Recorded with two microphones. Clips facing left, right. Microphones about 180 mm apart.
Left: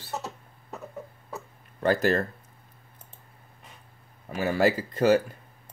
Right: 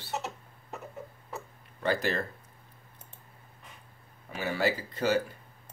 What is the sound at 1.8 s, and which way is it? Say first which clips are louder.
Speech: left 6 dB; 45° left (ahead or behind).